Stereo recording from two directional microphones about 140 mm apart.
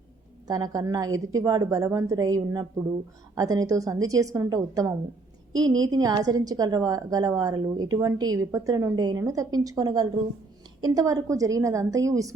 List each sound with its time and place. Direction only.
0.4 s a woman's voice: 30° right (ahead or behind)